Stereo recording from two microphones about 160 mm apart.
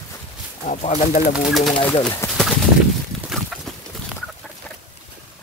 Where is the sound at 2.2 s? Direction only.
20° left (ahead or behind).